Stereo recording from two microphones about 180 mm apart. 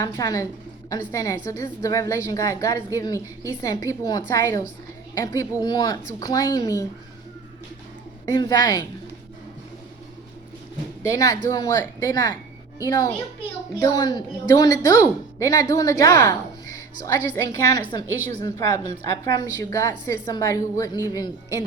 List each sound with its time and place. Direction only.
0.0 s a woman's voice: 20° left (ahead or behind)
8.3 s a woman's voice: 25° left (ahead or behind)
11.0 s a woman's voice: 20° left (ahead or behind)
14.2 s a woman's voice: 20° left (ahead or behind)